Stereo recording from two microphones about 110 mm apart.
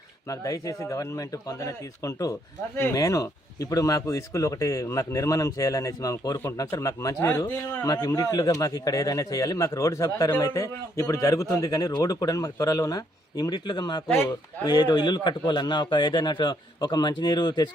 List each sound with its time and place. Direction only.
0.3 s a man's voice: 30° left (ahead or behind)
7.9 s speech: 35° left (ahead or behind)